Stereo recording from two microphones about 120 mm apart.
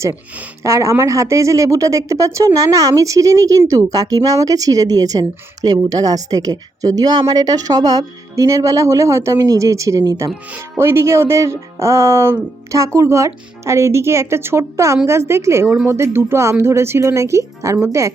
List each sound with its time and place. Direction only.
0.6 s a woman's voice: 25° right (ahead or behind)